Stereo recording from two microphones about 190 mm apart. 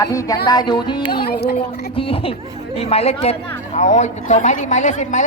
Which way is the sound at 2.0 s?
30° left (ahead or behind).